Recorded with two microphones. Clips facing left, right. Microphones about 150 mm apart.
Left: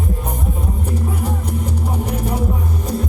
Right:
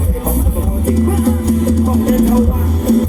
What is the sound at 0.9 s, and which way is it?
Music, 90° right.